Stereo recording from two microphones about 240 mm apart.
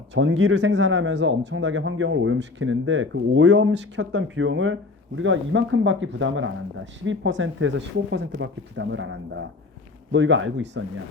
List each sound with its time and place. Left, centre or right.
0.1 s speech: right